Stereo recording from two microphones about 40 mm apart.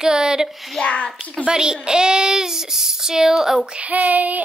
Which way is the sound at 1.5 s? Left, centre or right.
Centre.